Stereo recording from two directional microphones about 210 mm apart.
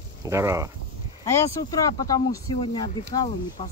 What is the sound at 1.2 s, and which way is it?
Speech, 15° left (ahead or behind).